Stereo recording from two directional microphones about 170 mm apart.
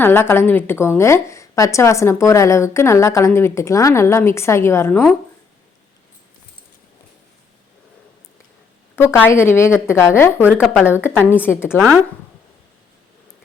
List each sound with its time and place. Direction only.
0.0 s a woman's voice: 15° left (ahead or behind)
9.0 s a woman's voice: 10° left (ahead or behind)
10.3 s a woman's voice: 10° right (ahead or behind)
11.0 s a woman's voice: 15° left (ahead or behind)